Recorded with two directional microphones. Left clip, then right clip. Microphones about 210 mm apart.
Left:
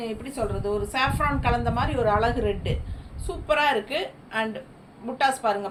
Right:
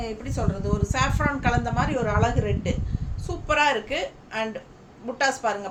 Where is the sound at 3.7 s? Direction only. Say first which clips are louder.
Even; 15° right (ahead or behind).